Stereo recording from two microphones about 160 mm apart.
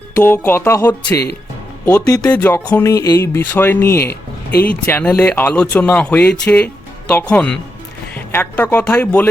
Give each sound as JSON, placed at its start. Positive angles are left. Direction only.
{"t": 0.2, "sound": "speech", "side_deg": 15}
{"t": 4.0, "sound": "music", "side_deg": 85}
{"t": 4.6, "sound": "speech", "side_deg": 10}